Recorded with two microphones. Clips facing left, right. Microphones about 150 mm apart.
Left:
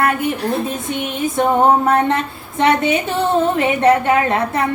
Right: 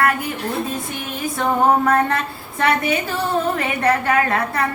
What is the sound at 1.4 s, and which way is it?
A woman's voice, 20° left (ahead or behind).